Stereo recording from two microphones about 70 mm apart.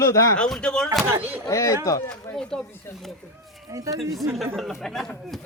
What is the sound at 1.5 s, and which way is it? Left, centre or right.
Speech, left.